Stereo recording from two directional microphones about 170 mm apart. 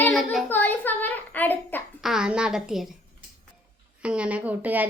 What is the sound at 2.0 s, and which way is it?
Speech, 5° right (ahead or behind).